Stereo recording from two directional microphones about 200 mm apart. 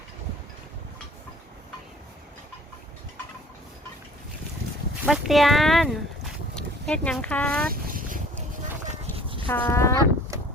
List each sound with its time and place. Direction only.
5.0 s speech: centre (ahead or behind)
7.7 s a sound: 45° right (ahead or behind)
9.5 s speech: 10° left (ahead or behind)